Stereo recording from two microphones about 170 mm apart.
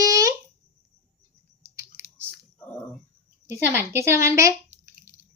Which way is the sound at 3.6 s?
15° right (ahead or behind).